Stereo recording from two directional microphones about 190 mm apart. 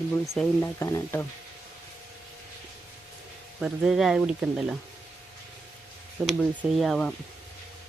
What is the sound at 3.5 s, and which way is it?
Speech, 5° right (ahead or behind).